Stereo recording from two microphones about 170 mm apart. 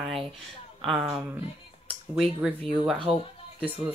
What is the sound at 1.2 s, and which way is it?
Speech, 10° right (ahead or behind).